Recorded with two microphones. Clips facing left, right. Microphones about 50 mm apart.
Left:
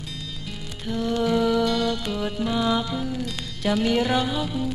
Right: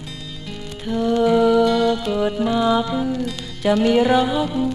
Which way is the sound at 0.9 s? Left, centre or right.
Centre.